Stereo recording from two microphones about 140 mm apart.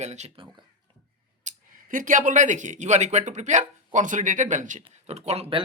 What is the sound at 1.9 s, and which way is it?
Speech, 70° right (ahead or behind).